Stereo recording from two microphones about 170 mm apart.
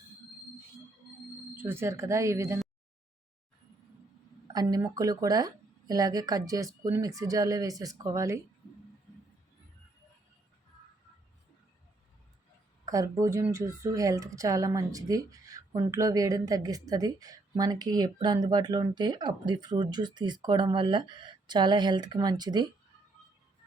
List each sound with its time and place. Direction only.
1.5 s speech: 15° right (ahead or behind)
4.4 s speech: 25° right (ahead or behind)
12.8 s speech: 20° right (ahead or behind)